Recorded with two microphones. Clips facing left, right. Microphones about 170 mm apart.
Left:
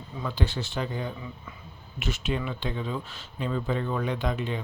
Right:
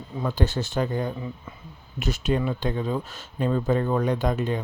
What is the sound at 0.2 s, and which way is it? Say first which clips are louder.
Speech: right 5 dB; 45° right (ahead or behind).